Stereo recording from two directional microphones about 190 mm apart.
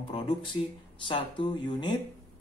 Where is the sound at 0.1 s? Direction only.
30° left (ahead or behind).